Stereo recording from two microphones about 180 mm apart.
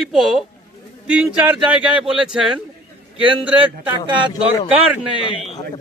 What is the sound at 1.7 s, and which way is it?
Speech, 5° right (ahead or behind).